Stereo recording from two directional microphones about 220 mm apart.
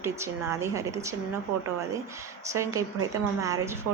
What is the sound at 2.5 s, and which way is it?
A woman's voice, 15° right (ahead or behind).